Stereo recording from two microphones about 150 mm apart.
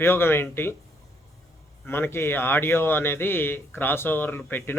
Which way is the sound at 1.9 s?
15° left (ahead or behind).